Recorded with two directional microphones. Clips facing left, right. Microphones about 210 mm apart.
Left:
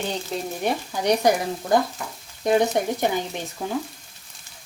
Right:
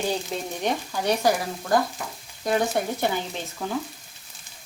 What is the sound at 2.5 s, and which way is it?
Speech, 15° left (ahead or behind).